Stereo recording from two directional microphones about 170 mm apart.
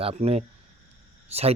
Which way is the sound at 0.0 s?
35° right (ahead or behind).